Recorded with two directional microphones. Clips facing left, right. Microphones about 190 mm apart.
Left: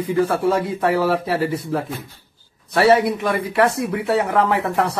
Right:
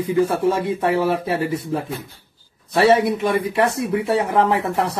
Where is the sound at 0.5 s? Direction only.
25° right (ahead or behind).